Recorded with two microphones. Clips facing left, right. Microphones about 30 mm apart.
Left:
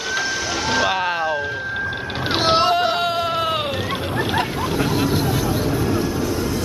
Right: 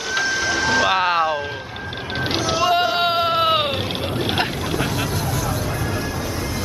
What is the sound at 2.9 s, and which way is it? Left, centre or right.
Sheep, right.